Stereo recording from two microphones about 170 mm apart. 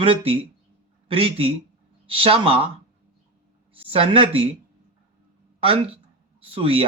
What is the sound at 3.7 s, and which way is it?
Speech, 35° right (ahead or behind).